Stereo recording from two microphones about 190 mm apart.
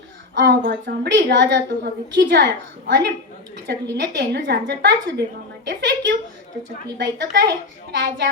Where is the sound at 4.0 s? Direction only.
60° right (ahead or behind).